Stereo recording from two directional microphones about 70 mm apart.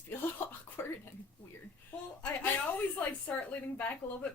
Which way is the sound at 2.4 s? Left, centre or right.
Left.